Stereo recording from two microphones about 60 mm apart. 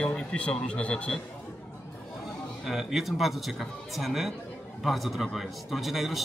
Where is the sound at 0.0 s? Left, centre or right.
Centre.